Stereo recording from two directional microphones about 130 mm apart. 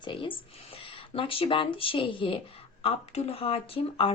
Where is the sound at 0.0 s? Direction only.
40° left (ahead or behind).